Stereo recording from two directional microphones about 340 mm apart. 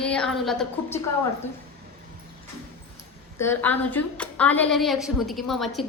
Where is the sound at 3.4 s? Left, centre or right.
Centre.